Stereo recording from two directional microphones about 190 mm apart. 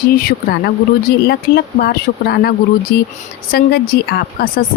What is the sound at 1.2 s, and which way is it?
Speech, 55° left (ahead or behind).